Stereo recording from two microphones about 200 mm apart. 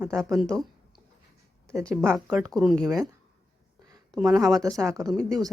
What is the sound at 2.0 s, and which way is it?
Speech, 10° right (ahead or behind).